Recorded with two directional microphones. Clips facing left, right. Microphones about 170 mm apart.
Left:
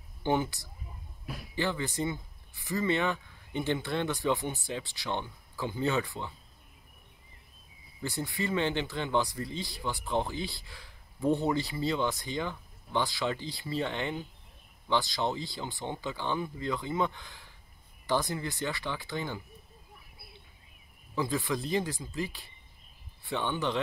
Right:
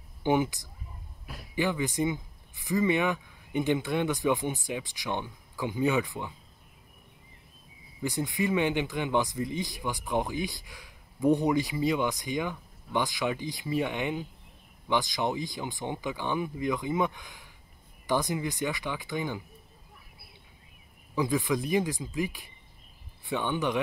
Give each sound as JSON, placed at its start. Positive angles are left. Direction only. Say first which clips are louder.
{"t": 0.2, "sound": "speech", "louder": "right 3 dB", "side_deg": -15}
{"t": 8.0, "sound": "speech", "louder": "right 4 dB", "side_deg": -15}
{"t": 21.1, "sound": "speech", "louder": "right 4 dB", "side_deg": -15}